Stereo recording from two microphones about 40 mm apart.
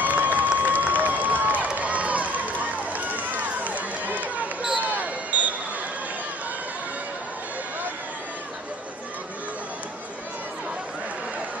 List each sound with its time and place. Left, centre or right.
0.0 s run: right
4.7 s basketball bounce: right